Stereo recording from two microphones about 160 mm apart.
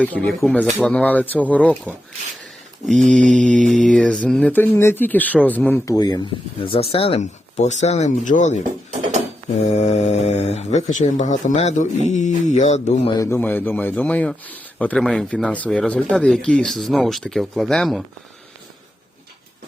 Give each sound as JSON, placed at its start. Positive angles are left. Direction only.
{"t": 0.0, "sound": "speech", "side_deg": 10}
{"t": 9.6, "sound": "speech", "side_deg": 45}
{"t": 13.1, "sound": "speech", "side_deg": 15}